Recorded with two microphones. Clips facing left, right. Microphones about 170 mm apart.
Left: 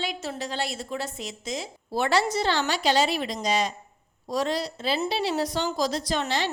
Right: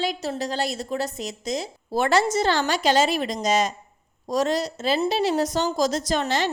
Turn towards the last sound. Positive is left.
turn(degrees=-45)  # may be behind; listen again after turning